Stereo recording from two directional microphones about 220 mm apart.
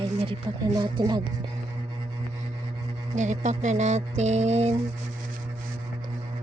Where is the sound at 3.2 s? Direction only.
35° right (ahead or behind).